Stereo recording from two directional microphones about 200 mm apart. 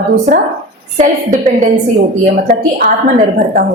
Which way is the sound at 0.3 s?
35° right (ahead or behind).